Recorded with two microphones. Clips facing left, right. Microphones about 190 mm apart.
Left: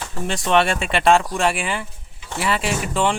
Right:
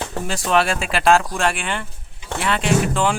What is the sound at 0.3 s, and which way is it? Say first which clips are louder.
Speech: left 1 dB; centre (ahead or behind).